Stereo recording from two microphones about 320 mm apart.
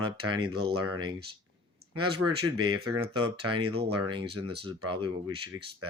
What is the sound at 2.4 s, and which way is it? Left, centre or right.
Speech, centre.